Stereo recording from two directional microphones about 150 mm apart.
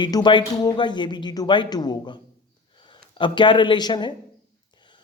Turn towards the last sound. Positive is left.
turn(degrees=30)  # may be behind; listen again after turning